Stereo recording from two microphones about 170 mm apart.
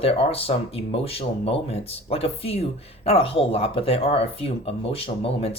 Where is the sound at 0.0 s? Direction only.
35° left (ahead or behind).